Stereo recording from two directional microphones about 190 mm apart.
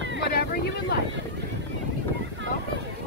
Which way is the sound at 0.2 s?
55° left (ahead or behind).